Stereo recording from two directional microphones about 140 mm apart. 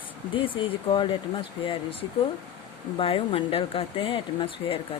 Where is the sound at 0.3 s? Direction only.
35° left (ahead or behind).